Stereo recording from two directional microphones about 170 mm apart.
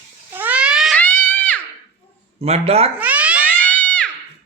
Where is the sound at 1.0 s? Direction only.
10° left (ahead or behind).